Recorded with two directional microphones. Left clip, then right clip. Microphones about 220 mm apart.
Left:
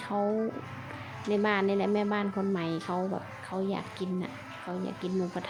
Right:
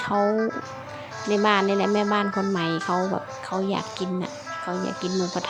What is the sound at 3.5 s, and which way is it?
Speech, 25° right (ahead or behind).